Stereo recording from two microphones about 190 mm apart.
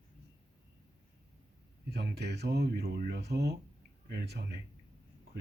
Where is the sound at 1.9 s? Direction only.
60° right (ahead or behind).